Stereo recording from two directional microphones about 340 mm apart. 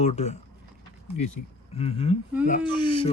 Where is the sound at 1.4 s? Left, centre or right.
Left.